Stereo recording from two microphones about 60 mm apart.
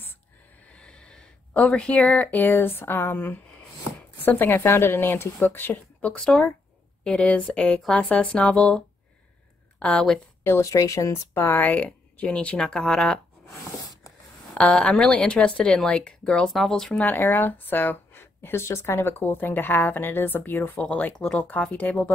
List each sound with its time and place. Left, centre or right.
0.7 s speech: centre
6.1 s a woman's voice: centre
7.1 s a woman's voice: left
10.6 s speech: left
11.3 s speech: left; by 13.2 s centre
14.6 s a woman's voice: centre
17.0 s speech: left
20.8 s a woman's voice: left